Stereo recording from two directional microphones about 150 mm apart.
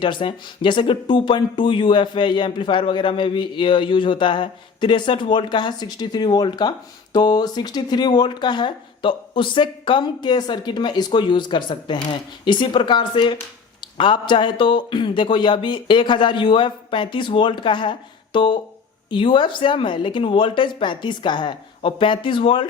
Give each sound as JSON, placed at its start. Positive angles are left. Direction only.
{"t": 0.0, "sound": "speech", "side_deg": 35}